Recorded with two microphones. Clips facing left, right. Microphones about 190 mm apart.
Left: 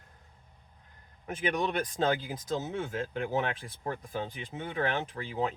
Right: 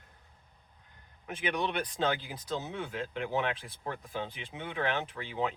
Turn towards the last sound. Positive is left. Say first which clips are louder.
# left 1 dB
turn(degrees=45)  # may be behind; listen again after turning